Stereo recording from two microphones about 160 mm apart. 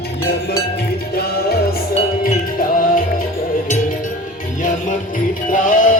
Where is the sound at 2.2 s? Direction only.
60° left (ahead or behind).